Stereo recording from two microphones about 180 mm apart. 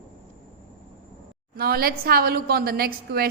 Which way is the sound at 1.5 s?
55° right (ahead or behind).